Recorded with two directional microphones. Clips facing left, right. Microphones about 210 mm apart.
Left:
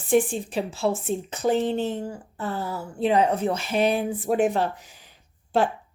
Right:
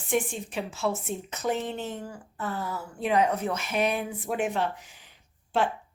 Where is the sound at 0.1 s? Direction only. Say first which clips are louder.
Left 7 dB; 35° left (ahead or behind).